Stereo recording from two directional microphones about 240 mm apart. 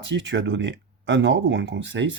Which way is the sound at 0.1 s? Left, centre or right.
Right.